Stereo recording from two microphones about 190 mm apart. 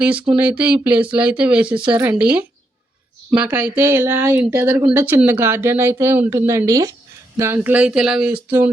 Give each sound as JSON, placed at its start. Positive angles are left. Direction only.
{"t": 0.0, "sound": "speech", "side_deg": -5}